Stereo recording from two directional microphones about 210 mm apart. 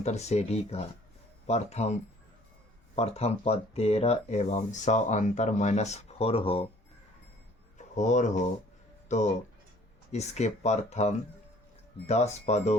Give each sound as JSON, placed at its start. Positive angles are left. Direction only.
{"t": 0.0, "sound": "speech", "side_deg": 30}
{"t": 7.8, "sound": "a sound", "side_deg": 35}
{"t": 9.0, "sound": "speech", "side_deg": 35}